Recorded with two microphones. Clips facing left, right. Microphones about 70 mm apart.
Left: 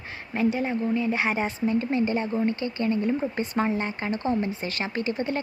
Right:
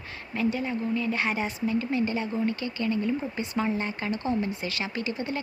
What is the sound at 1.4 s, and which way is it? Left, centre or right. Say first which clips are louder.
Speech: left 3 dB; left.